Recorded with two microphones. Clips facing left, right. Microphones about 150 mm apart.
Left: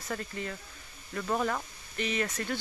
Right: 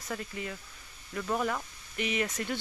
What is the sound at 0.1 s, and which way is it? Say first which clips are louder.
Speech: left 1 dB; 10° right (ahead or behind).